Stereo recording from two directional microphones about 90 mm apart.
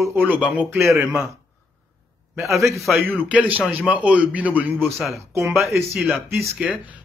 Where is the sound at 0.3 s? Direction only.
15° right (ahead or behind).